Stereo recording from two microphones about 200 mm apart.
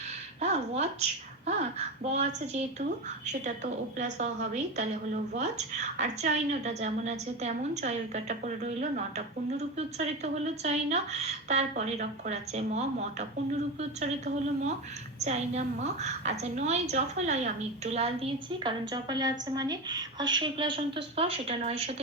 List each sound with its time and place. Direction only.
0.4 s a woman's voice: 35° right (ahead or behind)
2.0 s a woman's voice: 35° right (ahead or behind)